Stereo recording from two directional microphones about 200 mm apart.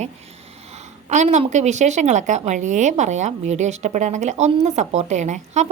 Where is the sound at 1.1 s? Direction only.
35° right (ahead or behind).